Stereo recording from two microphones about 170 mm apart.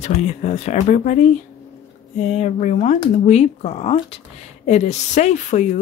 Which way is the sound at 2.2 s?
40° left (ahead or behind).